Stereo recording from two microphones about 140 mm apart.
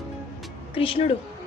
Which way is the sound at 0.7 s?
40° left (ahead or behind).